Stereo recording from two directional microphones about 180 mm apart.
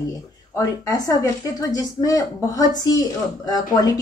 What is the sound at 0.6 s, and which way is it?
Speech, 20° left (ahead or behind).